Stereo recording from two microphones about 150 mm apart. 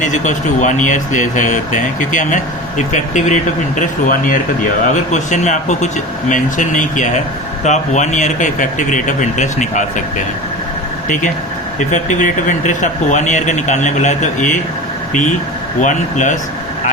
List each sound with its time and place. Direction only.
0.0 s speech: 55° left (ahead or behind)
11.9 s speech: 55° left (ahead or behind)